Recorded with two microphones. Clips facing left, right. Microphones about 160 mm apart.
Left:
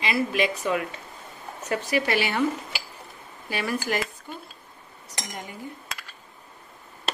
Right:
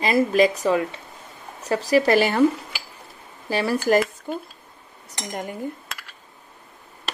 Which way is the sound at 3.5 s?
35° right (ahead or behind).